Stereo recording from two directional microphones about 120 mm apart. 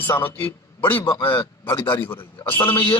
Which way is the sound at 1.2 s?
45° left (ahead or behind).